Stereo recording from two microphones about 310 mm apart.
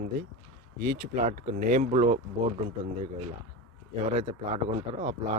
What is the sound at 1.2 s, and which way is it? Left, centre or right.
Speech, right.